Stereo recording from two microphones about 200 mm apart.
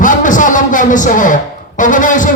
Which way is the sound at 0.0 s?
40° left (ahead or behind).